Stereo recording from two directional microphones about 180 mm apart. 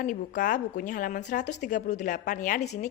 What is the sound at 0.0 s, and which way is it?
A woman's voice, 45° left (ahead or behind).